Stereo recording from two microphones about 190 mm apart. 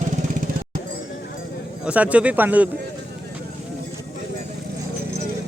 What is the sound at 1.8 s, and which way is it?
Speech, 5° right (ahead or behind).